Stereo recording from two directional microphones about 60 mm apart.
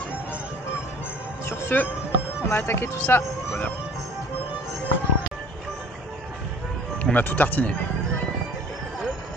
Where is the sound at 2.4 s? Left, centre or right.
Left.